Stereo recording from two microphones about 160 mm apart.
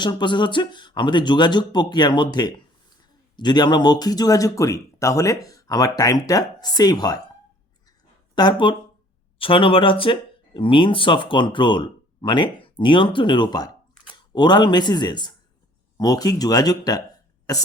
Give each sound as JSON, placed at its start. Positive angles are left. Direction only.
{"t": 0.0, "sound": "speech", "side_deg": 30}
{"t": 8.4, "sound": "speech", "side_deg": 30}